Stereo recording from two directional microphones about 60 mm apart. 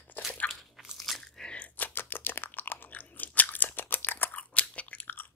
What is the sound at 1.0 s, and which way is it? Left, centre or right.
Biting, centre.